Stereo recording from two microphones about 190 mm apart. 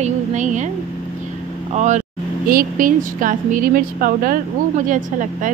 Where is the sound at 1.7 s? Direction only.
40° right (ahead or behind).